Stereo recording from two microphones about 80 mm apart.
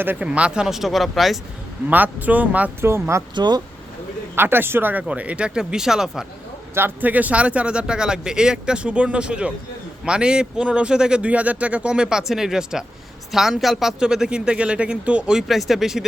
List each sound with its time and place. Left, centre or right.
0.0 s speech: right
0.3 s speech: centre
1.9 s speech: right
2.8 s speech: right
3.3 s speech: right
4.4 s speech: right; by 6.2 s centre
6.7 s speech: right; by 16.0 s centre